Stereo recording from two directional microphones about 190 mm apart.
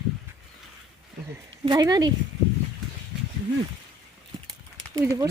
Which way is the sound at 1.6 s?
20° right (ahead or behind).